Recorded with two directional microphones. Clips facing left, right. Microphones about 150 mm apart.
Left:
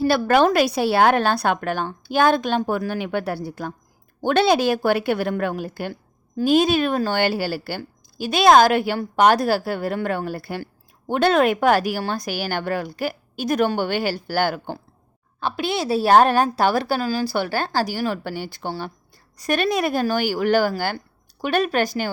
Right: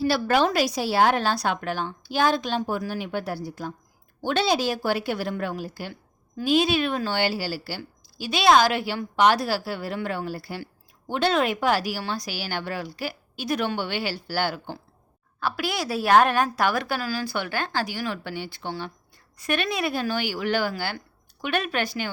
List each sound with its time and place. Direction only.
0.0 s a woman's voice: 55° left (ahead or behind)
5.9 s a woman's voice: 40° left (ahead or behind)
15.4 s a woman's voice: 25° left (ahead or behind); by 22.1 s 40° left (ahead or behind)